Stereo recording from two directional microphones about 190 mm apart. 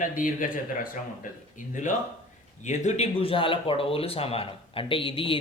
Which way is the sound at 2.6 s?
40° left (ahead or behind).